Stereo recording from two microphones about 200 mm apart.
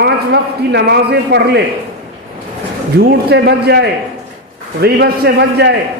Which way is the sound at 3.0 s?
55° right (ahead or behind).